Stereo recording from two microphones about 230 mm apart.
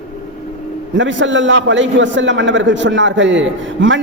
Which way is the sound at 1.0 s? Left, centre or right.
Right.